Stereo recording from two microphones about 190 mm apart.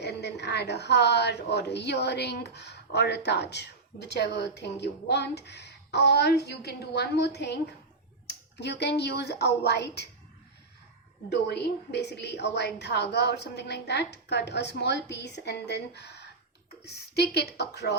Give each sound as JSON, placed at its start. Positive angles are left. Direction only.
{"t": 0.0, "sound": "a woman's voice", "side_deg": 60}
{"t": 11.3, "sound": "a woman's voice", "side_deg": 60}